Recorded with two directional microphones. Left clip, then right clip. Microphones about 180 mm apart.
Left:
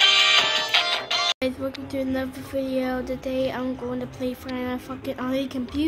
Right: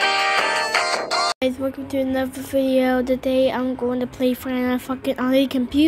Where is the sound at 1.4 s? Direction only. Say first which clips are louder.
Right 5 dB; 20° right (ahead or behind).